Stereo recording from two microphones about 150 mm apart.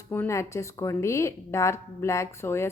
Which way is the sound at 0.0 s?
15° left (ahead or behind).